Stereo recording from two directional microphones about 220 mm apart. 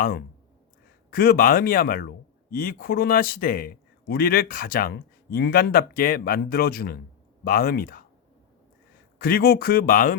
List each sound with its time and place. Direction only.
1.1 s speech: 40° left (ahead or behind)
9.1 s speech: 40° left (ahead or behind)